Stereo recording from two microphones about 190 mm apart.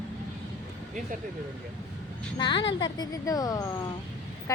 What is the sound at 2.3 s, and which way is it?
A woman's voice, 25° left (ahead or behind).